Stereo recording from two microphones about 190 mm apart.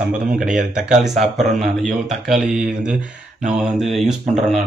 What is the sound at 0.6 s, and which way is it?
Speech, 40° right (ahead or behind).